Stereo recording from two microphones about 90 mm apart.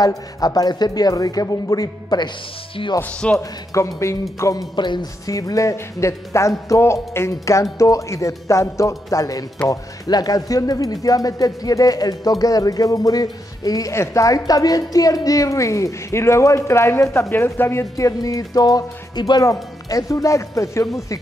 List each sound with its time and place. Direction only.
0.0 s speech: 40° left (ahead or behind)
3.0 s speech: 15° left (ahead or behind)
3.3 s speech: 35° left (ahead or behind)
4.7 s speech: 60° left (ahead or behind)
5.2 s speech: 40° left (ahead or behind)
19.4 s speech: 40° left (ahead or behind)